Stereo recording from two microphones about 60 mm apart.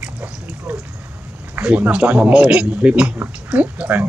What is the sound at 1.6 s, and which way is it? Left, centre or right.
Speech, right.